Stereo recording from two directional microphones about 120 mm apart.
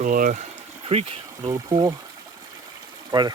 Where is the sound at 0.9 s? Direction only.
60° right (ahead or behind).